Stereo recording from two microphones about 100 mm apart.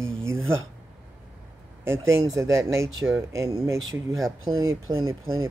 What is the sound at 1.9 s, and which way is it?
Speech, 30° right (ahead or behind).